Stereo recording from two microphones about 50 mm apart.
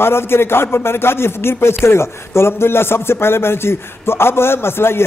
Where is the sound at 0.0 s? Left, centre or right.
Left.